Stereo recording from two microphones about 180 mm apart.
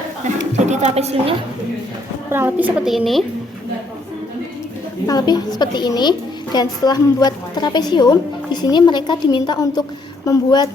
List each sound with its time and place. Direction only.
0.5 s speech: 40° right (ahead or behind)
2.3 s a woman's voice: 10° right (ahead or behind)
5.0 s a woman's voice: 20° left (ahead or behind)